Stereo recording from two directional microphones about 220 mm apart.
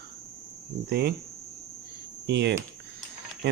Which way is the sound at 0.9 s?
50° right (ahead or behind).